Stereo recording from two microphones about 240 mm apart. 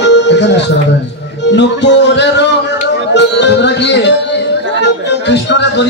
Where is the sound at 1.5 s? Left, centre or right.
Left.